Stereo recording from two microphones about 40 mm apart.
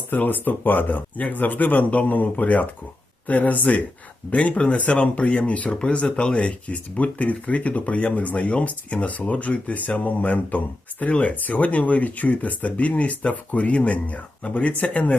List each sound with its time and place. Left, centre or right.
0.2 s speech: left
4.3 s speech: left